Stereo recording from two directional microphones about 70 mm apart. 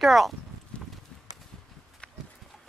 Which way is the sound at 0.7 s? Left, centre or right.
Centre.